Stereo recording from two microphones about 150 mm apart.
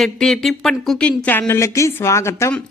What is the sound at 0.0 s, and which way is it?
Speech, centre (ahead or behind).